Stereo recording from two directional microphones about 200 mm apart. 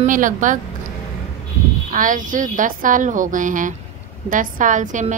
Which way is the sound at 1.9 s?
40° right (ahead or behind).